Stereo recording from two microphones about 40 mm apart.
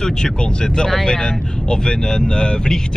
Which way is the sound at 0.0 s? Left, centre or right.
Centre.